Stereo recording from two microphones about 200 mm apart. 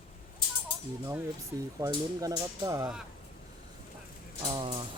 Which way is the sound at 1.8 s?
20° right (ahead or behind).